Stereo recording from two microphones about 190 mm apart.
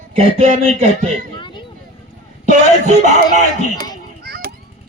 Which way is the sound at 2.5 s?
40° right (ahead or behind).